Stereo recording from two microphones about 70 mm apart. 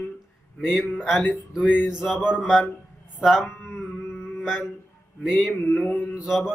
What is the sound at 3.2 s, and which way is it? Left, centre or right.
Music, centre.